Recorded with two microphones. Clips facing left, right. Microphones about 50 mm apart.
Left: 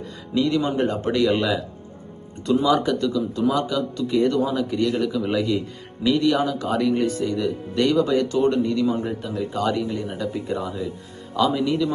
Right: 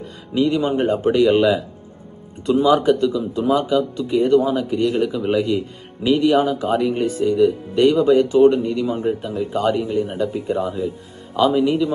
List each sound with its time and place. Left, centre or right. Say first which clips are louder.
0.3 s speech: right 3 dB; right
2.6 s speech: right 6 dB; right
4.8 s speech: right 1 dB; right; by 9.0 s centre
9.0 s speech: right 4 dB; right